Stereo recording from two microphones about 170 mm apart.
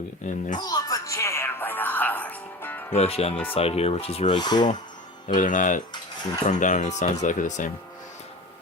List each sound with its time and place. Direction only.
0.2 s speech: 45° left (ahead or behind)
0.6 s speech: 20° left (ahead or behind)
2.9 s rub: 35° left (ahead or behind)
5.3 s speech: 50° left (ahead or behind)